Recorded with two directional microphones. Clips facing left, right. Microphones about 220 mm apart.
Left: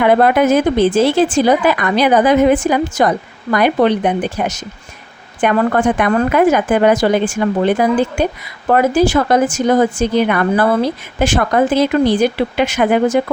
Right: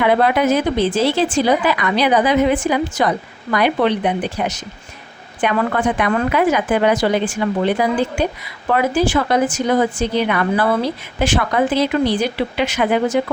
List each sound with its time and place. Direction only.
0.0 s a woman's voice: 45° left (ahead or behind)